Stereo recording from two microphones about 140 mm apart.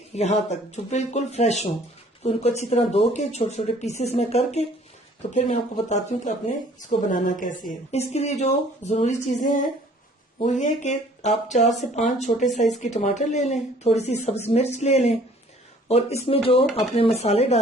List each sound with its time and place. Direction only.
0.1 s a woman's voice: 50° left (ahead or behind)
6.7 s a woman's voice: 65° left (ahead or behind)
11.6 s speech: centre (ahead or behind)
11.9 s a woman's voice: 55° left (ahead or behind)